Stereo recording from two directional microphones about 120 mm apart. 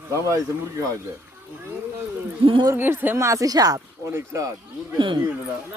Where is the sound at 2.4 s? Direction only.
45° right (ahead or behind).